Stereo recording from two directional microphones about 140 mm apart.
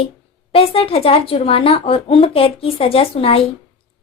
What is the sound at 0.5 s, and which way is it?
Speech, 40° left (ahead or behind).